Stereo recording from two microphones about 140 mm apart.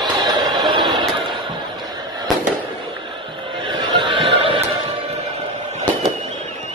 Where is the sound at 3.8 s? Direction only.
35° right (ahead or behind).